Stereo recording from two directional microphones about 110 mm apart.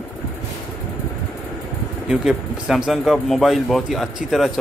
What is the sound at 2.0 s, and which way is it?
Speech, 5° right (ahead or behind).